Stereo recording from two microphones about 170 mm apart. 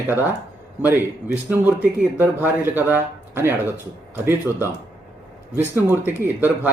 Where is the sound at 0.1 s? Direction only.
10° right (ahead or behind).